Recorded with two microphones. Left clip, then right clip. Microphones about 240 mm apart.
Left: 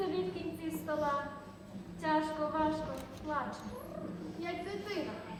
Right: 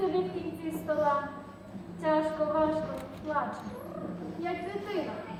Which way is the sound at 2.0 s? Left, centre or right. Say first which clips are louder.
Right 5 dB; centre.